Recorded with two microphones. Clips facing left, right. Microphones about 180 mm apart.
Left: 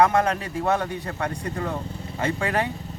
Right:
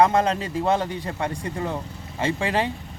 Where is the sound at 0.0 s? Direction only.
25° right (ahead or behind).